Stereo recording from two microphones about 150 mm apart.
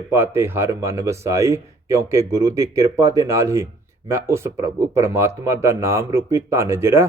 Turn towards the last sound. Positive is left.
turn(degrees=-15)  # may be behind; listen again after turning